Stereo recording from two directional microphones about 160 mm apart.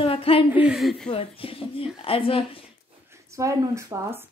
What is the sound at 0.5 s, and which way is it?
Speech, 5° right (ahead or behind).